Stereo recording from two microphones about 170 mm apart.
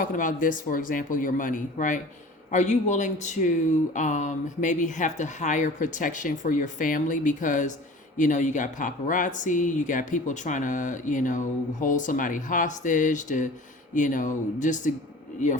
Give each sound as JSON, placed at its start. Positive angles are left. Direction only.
{"t": 0.0, "sound": "speech", "side_deg": 50}